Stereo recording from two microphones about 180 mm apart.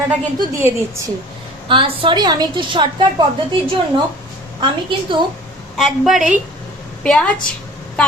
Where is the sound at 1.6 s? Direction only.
30° right (ahead or behind).